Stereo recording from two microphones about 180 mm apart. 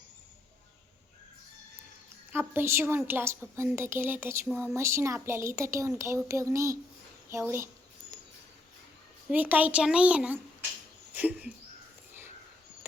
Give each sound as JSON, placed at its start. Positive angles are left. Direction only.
{"t": 2.3, "sound": "a woman's voice", "side_deg": -10}
{"t": 9.3, "sound": "a woman's voice", "side_deg": -10}
{"t": 11.1, "sound": "a sound", "side_deg": -10}